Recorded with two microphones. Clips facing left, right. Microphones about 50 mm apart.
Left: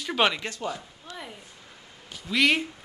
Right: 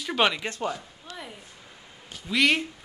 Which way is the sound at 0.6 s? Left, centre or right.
Right.